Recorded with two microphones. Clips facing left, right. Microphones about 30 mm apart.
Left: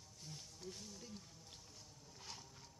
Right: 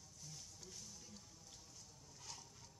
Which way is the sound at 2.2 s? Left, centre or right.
Left.